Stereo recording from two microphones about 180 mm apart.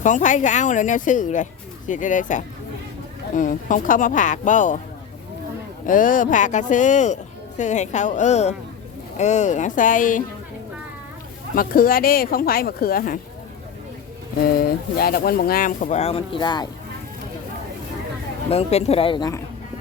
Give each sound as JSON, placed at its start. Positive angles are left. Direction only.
{"t": 0.0, "sound": "speech", "side_deg": 45}
{"t": 5.8, "sound": "speech", "side_deg": 45}
{"t": 11.5, "sound": "speech", "side_deg": 50}
{"t": 14.9, "sound": "speech", "side_deg": 60}
{"t": 18.5, "sound": "speech", "side_deg": 35}